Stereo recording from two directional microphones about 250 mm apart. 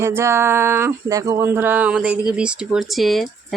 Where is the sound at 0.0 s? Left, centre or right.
Centre.